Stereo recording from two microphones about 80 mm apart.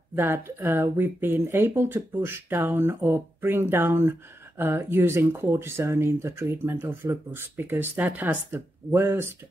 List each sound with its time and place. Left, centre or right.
0.1 s speech: right